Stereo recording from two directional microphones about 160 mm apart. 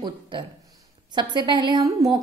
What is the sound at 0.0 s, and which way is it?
A woman's voice, 30° right (ahead or behind).